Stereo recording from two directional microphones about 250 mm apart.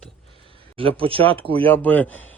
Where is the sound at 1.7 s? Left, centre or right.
Centre.